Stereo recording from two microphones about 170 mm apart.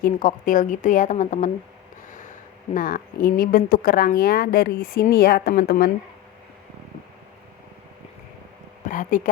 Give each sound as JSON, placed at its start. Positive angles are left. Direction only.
{"t": 0.0, "sound": "a woman's voice", "side_deg": 50}
{"t": 2.7, "sound": "speech", "side_deg": 55}
{"t": 8.9, "sound": "speech", "side_deg": 50}